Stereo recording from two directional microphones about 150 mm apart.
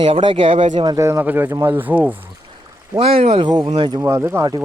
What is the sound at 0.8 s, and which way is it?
Speech, 20° right (ahead or behind).